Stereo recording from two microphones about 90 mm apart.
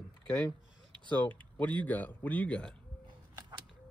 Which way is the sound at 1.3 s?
15° left (ahead or behind).